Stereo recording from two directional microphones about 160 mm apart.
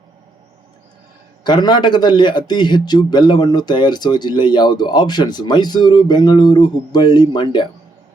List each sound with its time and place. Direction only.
1.5 s a man's voice: 25° left (ahead or behind)